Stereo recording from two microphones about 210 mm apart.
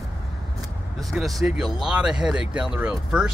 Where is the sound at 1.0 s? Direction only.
Centre (ahead or behind).